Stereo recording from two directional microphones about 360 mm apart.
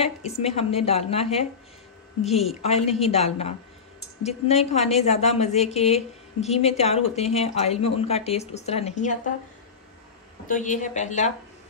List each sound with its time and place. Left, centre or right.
0.0 s a woman's voice: centre
2.6 s a woman's voice: centre
10.4 s a woman's voice: left